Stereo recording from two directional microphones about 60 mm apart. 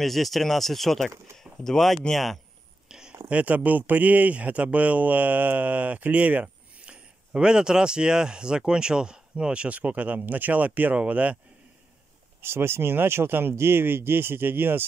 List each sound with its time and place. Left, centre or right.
0.0 s speech: centre
2.9 s a sound: centre
3.3 s speech: right
12.4 s speech: right